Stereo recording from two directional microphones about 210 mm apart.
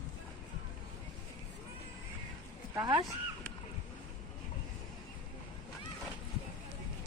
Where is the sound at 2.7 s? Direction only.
15° right (ahead or behind).